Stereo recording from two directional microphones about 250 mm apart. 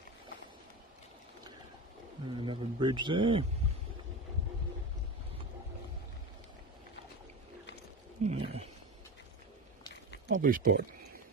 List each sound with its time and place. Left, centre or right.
2.2 s a man's voice: centre
8.2 s wild animals: right
10.2 s speech: right